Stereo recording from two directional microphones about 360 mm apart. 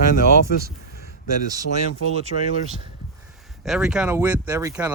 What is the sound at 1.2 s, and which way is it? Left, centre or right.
Speech, right.